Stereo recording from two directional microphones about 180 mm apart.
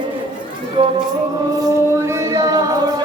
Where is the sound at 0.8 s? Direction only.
30° right (ahead or behind).